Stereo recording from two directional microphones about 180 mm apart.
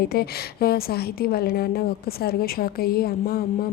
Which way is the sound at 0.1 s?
60° left (ahead or behind).